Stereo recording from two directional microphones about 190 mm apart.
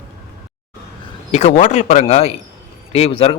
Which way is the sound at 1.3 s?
35° left (ahead or behind).